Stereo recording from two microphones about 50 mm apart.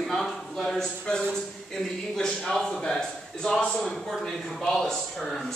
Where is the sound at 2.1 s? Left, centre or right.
Centre.